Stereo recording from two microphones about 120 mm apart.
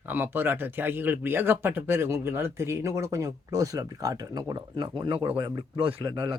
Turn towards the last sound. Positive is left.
turn(degrees=-35)  # may be behind; listen again after turning